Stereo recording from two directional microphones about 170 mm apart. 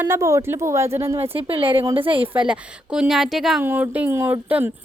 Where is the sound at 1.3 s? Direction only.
30° right (ahead or behind).